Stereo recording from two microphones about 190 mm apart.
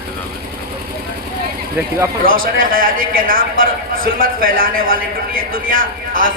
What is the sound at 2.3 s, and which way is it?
A man's voice, 50° right (ahead or behind).